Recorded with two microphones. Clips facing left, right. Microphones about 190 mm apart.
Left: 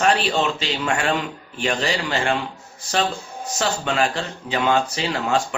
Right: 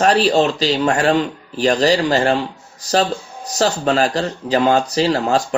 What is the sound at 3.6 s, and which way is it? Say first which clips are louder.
Speech: right 6 dB; 40° right (ahead or behind).